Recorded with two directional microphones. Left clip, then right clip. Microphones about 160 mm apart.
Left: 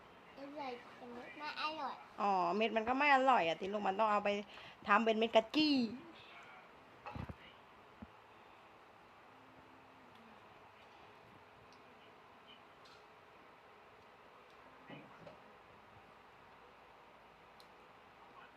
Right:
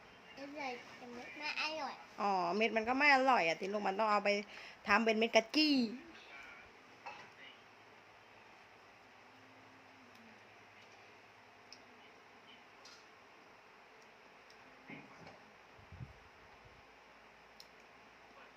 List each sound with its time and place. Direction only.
1.4 s a woman's voice: 15° right (ahead or behind)